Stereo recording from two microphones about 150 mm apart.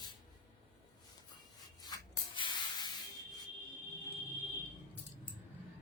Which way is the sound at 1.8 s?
25° left (ahead or behind).